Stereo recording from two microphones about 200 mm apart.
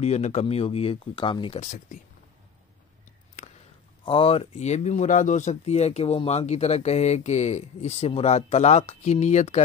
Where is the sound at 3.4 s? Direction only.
40° left (ahead or behind).